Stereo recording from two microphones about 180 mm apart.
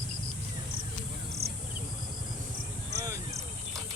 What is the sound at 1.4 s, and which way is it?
Insect, 60° right (ahead or behind).